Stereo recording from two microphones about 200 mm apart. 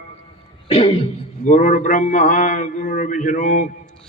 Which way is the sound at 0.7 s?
30° left (ahead or behind).